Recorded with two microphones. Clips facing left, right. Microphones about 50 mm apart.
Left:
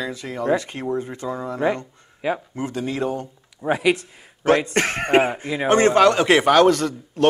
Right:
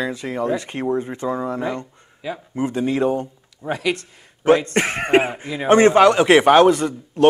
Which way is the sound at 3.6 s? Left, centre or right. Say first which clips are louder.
Left 3 dB; centre.